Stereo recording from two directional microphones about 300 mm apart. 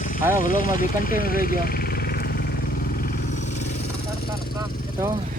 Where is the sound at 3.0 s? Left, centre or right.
Left.